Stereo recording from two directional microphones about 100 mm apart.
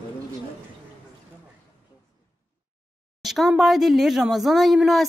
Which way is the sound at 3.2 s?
Centre (ahead or behind).